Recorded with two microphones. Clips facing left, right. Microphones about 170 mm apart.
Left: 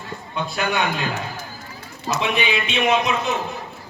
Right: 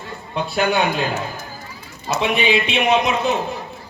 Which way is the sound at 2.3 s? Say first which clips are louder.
Right 4 dB; 30° right (ahead or behind).